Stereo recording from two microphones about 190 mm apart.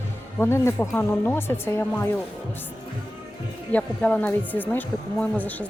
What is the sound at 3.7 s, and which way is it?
Speech, 10° left (ahead or behind).